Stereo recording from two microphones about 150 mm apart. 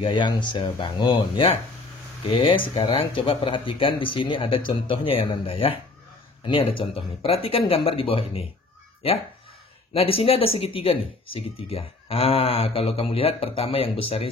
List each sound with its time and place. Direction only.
0.0 s speech: 30° left (ahead or behind)
9.9 s speech: 40° left (ahead or behind)